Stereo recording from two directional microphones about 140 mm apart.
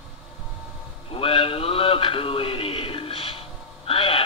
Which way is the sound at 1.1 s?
40° left (ahead or behind).